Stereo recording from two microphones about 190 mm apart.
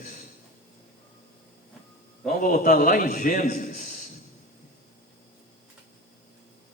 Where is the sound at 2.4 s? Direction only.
45° left (ahead or behind).